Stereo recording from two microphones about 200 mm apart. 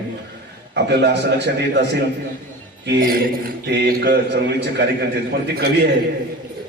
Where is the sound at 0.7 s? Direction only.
60° right (ahead or behind).